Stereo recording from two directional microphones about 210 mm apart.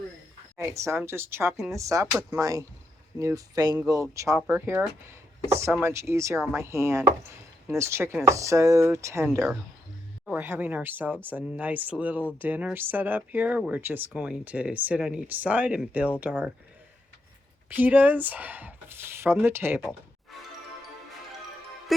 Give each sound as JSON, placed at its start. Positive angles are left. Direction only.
{"t": 0.6, "sound": "speech", "side_deg": -15}
{"t": 17.7, "sound": "speech", "side_deg": -10}